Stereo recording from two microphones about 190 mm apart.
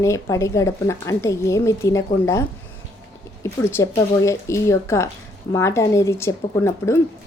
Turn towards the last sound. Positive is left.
turn(degrees=15)  # may be behind; listen again after turning